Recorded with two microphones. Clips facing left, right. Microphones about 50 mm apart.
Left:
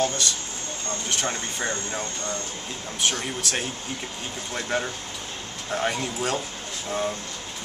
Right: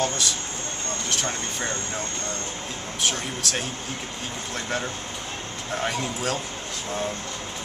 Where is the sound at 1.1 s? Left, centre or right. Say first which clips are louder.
Left 1 dB; centre.